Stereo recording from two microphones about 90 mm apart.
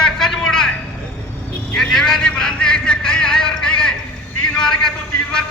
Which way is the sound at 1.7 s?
5° left (ahead or behind).